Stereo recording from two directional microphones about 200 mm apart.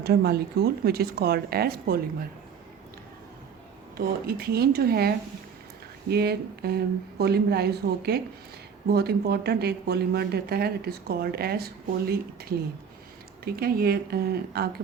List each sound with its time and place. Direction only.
0.0 s speech: 50° right (ahead or behind)
3.9 s speech: 50° right (ahead or behind)